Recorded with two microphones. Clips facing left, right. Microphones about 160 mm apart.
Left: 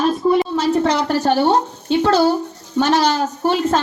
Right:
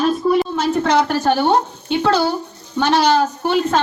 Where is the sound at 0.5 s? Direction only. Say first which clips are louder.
Even; 35° left (ahead or behind).